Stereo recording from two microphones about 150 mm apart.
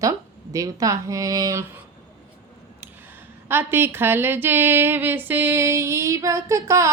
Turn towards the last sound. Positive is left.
turn(degrees=-20)  # may be behind; listen again after turning